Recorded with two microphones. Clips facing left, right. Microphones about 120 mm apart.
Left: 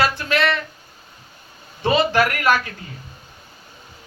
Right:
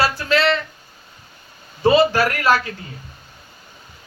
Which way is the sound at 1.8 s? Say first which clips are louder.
Right 3 dB; 30° right (ahead or behind).